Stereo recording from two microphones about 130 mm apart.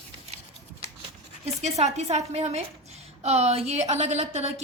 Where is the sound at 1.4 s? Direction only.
55° right (ahead or behind).